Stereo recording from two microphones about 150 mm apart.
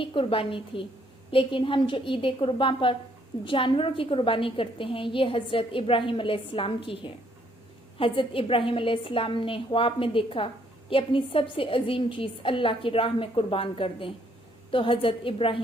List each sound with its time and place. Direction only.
0.0 s a woman's voice: 35° left (ahead or behind)